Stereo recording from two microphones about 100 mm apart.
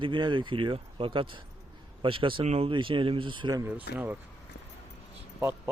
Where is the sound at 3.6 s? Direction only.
20° right (ahead or behind).